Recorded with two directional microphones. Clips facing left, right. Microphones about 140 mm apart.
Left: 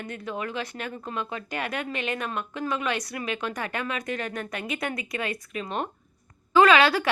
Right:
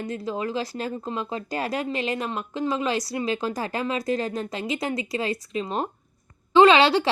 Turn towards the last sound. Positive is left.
turn(degrees=-25)  # may be behind; listen again after turning